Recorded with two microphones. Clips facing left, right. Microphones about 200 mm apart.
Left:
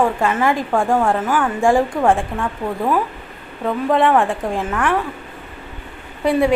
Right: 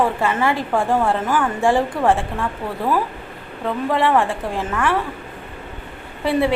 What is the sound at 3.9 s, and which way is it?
A woman's voice, 15° left (ahead or behind).